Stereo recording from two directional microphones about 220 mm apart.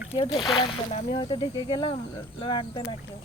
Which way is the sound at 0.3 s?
20° left (ahead or behind).